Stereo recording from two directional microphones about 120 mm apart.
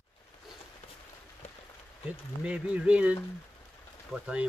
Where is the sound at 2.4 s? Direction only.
10° right (ahead or behind).